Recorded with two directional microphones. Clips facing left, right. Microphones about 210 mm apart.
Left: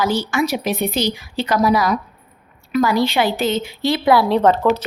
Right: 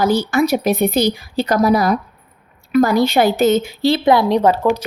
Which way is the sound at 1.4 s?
45° right (ahead or behind).